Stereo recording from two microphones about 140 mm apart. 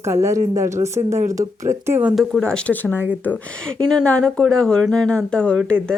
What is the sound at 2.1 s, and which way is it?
Speech, centre (ahead or behind).